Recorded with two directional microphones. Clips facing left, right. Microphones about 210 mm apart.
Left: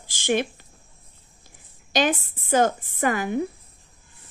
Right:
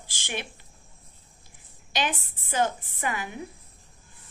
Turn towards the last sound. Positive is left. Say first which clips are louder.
# left 9 dB
turn(degrees=45)  # may be behind; listen again after turning